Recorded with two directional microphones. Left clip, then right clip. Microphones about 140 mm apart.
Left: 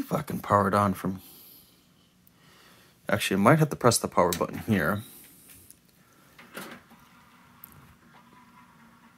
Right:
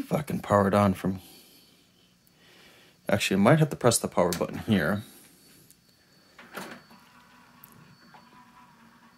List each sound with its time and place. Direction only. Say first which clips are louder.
0.1 s speech: even; 20° right (ahead or behind)
2.5 s a sound: right 1 dB; 30° right (ahead or behind)
3.4 s speech: left 2 dB; 5° right (ahead or behind)